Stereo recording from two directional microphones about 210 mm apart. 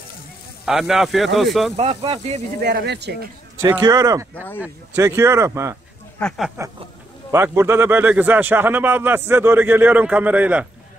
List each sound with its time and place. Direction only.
0.7 s speech: centre (ahead or behind)
1.8 s speech: 30° right (ahead or behind)
2.6 s speech: 50° right (ahead or behind)
3.7 s a man's voice: 20° right (ahead or behind)
6.1 s speech: centre (ahead or behind)
7.2 s a man's voice: 10° right (ahead or behind)